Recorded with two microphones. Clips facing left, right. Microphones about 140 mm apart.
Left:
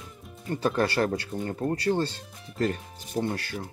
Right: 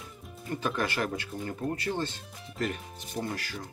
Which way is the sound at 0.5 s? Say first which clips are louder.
Left 5 dB; 35° left (ahead or behind).